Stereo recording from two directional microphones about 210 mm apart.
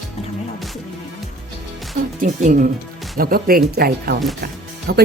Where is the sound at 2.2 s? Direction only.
35° right (ahead or behind).